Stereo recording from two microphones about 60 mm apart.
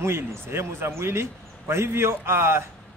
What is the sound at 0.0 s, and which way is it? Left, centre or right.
A man's voice, right.